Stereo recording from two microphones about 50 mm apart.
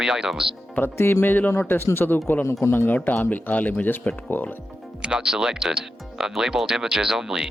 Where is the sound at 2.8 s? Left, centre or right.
Left.